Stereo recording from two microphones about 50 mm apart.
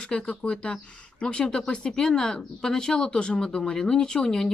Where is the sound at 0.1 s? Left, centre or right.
Centre.